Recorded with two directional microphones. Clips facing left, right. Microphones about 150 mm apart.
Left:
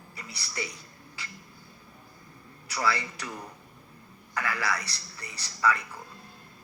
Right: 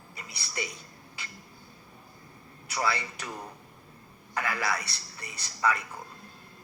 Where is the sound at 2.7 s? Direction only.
20° right (ahead or behind).